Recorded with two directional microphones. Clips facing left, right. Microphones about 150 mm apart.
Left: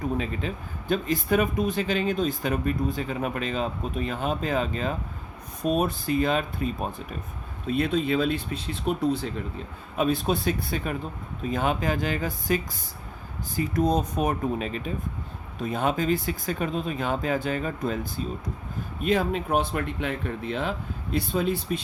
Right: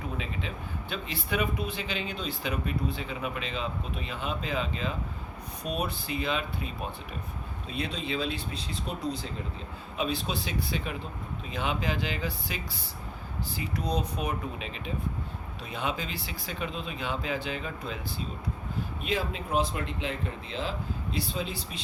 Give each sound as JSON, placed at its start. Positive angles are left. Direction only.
{"t": 0.2, "sound": "speech", "side_deg": 45}